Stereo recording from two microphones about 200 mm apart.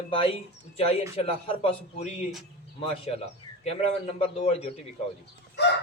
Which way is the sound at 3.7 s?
30° left (ahead or behind).